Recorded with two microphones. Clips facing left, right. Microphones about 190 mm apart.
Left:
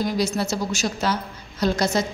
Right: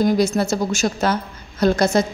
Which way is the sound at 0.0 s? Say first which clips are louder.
Right 6 dB; 50° right (ahead or behind).